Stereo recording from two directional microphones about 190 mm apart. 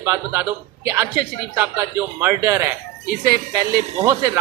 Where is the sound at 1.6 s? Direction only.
10° right (ahead or behind).